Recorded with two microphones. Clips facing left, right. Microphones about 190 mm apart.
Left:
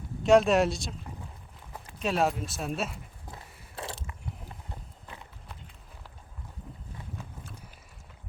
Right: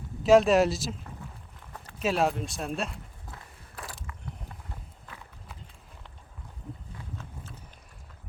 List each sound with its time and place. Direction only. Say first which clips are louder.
0.2 s speech: right 2 dB; centre (ahead or behind)
2.0 s speech: right 1 dB; centre (ahead or behind)
3.2 s biting: left 1 dB; 20° left (ahead or behind)